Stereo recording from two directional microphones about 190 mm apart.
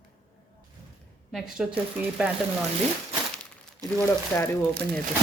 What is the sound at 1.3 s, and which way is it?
Speech, centre (ahead or behind).